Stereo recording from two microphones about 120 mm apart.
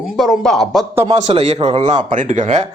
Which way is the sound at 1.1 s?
60° right (ahead or behind).